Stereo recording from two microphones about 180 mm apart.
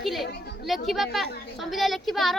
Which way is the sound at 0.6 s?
Centre (ahead or behind).